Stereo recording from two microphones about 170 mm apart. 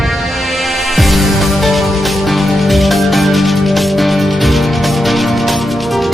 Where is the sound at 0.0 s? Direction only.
Centre (ahead or behind).